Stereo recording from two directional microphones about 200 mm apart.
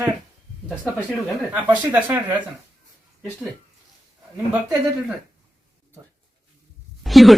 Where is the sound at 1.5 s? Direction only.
10° right (ahead or behind).